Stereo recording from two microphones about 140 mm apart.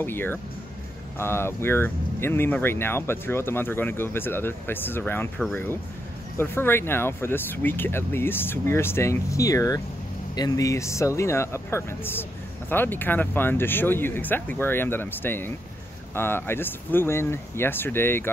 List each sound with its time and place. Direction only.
0.0 s speech: 15° left (ahead or behind)